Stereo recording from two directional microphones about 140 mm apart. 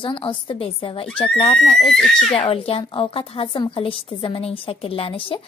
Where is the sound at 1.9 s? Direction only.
5° left (ahead or behind).